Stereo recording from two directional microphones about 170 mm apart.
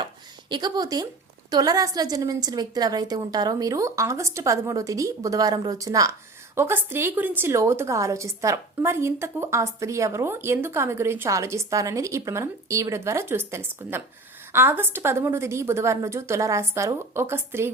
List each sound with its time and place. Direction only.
0.5 s a woman's voice: 25° right (ahead or behind)